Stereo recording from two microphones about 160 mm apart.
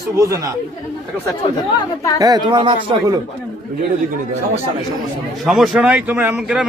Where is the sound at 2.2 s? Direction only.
25° right (ahead or behind).